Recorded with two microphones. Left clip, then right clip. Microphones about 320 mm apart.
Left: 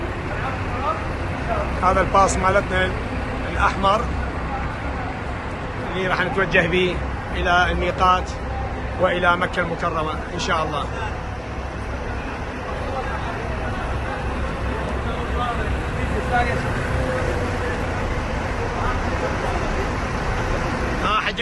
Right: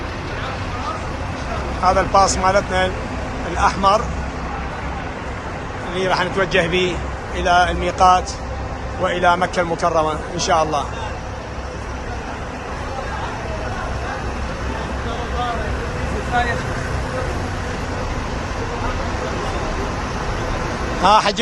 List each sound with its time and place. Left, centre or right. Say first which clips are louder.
1.8 s speech: right 3 dB; centre
6.0 s a man's voice: right 3 dB; centre
21.1 s a man's voice: right 9 dB; centre